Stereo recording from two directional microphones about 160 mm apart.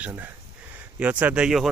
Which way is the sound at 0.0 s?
10° right (ahead or behind).